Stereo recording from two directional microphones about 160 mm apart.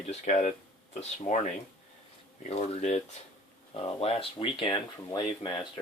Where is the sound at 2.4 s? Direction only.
45° left (ahead or behind).